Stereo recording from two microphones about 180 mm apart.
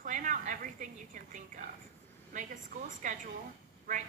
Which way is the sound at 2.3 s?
45° right (ahead or behind).